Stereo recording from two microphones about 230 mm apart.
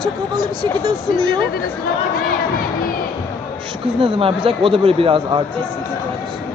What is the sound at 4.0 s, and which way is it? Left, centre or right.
Speech, right.